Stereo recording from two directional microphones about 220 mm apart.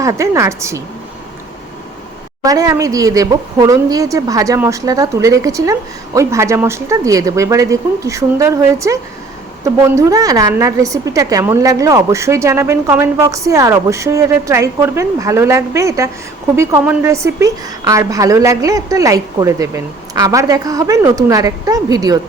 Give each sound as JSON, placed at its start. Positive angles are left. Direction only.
{"t": 0.0, "sound": "a woman's voice", "side_deg": -15}
{"t": 2.4, "sound": "a woman's voice", "side_deg": -15}